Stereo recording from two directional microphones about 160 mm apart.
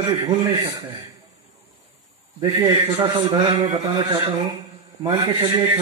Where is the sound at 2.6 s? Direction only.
25° right (ahead or behind).